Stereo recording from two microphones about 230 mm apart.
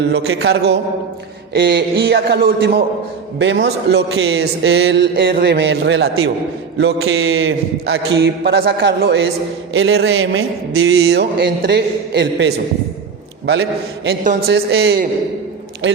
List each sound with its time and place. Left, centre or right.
0.1 s a man's voice: right
1.5 s a man's voice: right